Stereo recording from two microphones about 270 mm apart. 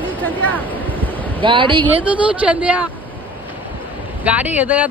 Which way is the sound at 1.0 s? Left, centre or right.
Centre.